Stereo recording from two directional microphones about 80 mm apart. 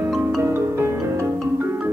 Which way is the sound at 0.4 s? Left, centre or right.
Right.